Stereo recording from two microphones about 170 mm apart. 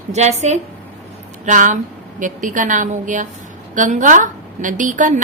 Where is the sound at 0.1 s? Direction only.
40° right (ahead or behind).